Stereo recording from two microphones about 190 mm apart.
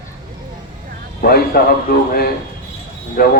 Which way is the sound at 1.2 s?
50° left (ahead or behind).